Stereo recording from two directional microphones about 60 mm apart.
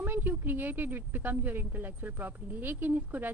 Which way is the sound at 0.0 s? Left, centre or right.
Right.